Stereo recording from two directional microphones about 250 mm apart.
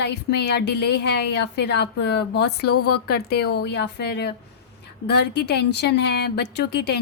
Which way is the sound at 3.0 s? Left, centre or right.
Left.